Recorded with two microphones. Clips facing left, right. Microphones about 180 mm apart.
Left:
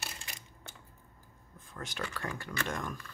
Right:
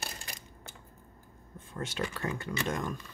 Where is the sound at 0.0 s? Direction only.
35° right (ahead or behind).